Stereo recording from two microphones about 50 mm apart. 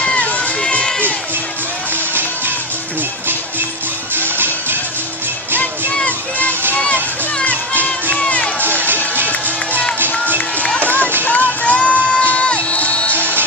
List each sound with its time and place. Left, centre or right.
0.0 s run: left
0.6 s a sound: centre
6.8 s children playing: centre
8.3 s music: left
8.8 s music: right
10.1 s music: left
10.8 s run: left
11.2 s music: left